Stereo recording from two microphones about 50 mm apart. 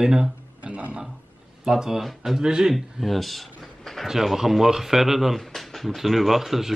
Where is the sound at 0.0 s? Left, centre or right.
Centre.